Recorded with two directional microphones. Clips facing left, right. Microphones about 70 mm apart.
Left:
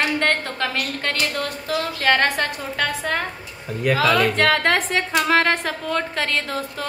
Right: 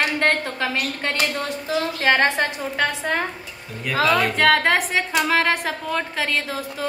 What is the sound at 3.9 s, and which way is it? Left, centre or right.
Speech, left.